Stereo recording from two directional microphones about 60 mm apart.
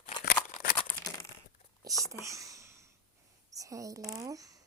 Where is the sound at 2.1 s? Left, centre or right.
Right.